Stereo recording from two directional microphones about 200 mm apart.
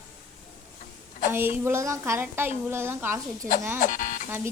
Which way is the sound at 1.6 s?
15° right (ahead or behind).